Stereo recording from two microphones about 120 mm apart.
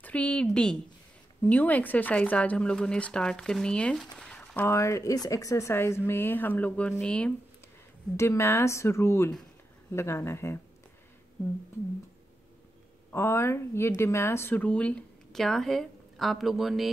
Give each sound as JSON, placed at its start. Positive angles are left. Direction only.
{"t": 0.0, "sound": "speech", "side_deg": 10}
{"t": 8.2, "sound": "speech", "side_deg": 20}
{"t": 13.1, "sound": "speech", "side_deg": 20}